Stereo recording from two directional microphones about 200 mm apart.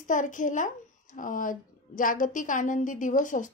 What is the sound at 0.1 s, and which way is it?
A woman's voice, 40° left (ahead or behind).